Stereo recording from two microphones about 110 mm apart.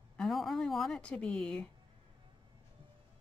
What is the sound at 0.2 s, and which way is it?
A woman's voice, centre (ahead or behind).